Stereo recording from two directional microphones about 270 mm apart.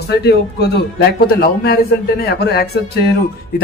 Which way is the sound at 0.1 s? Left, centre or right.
Left.